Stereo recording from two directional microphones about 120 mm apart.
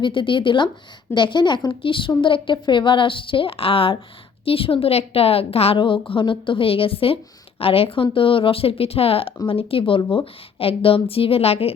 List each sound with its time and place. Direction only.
0.0 s a woman's voice: 45° left (ahead or behind)